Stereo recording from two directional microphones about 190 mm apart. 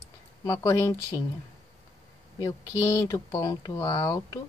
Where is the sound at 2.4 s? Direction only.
20° left (ahead or behind).